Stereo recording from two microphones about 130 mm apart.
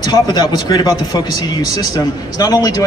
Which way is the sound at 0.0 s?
30° left (ahead or behind).